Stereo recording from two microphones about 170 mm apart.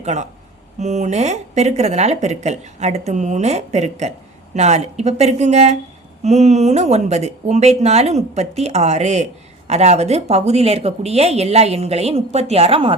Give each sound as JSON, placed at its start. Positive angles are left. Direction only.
{"t": 0.0, "sound": "speech", "side_deg": -45}